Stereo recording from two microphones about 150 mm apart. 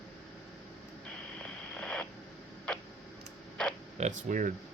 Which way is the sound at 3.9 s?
55° right (ahead or behind).